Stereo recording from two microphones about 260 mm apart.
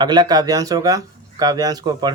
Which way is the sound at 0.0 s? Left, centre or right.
Centre.